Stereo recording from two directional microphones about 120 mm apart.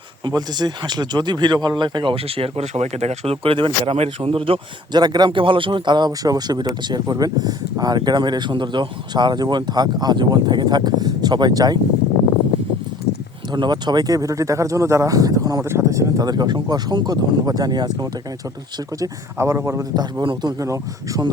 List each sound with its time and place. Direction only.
0.3 s speech: 35° right (ahead or behind)
13.5 s speech: 35° right (ahead or behind)
20.6 s speech: 25° right (ahead or behind)